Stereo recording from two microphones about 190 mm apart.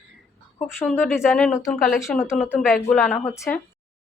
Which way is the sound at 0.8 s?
10° left (ahead or behind).